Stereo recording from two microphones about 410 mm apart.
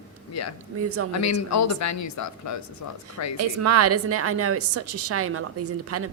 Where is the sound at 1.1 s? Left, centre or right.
Left.